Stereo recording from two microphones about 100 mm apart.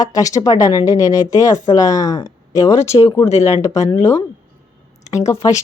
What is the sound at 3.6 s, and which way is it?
Speech, 30° left (ahead or behind).